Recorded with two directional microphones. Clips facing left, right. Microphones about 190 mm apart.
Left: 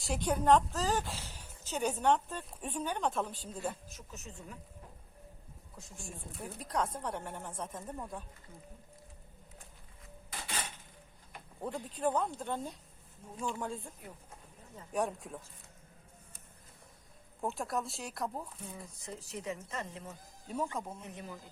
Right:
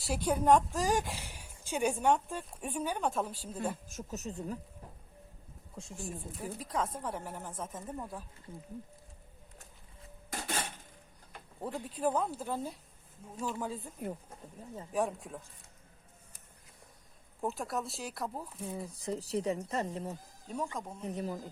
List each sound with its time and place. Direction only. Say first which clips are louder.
0.1 s a woman's voice: right 1 dB; 5° right (ahead or behind)
3.8 s speech: right 9 dB; 45° right (ahead or behind)
5.7 s speech: right 7 dB; 25° right (ahead or behind)
6.0 s speech: right 4 dB; centre (ahead or behind)
10.2 s dishes: right 5 dB; 45° right (ahead or behind)
11.6 s speech: right 1 dB; 5° right (ahead or behind)
14.9 s speech: right 1 dB; centre (ahead or behind)
17.4 s speech: even; centre (ahead or behind)
18.9 s speech: right 9 dB; 35° right (ahead or behind)
20.5 s speech: left 1 dB; centre (ahead or behind)
21.0 s speech: right 9 dB; 35° right (ahead or behind)